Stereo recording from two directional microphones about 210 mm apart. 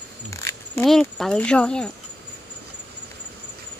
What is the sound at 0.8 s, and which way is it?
Speech, centre (ahead or behind).